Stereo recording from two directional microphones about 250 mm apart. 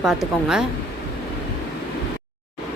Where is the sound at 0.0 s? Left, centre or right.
Centre.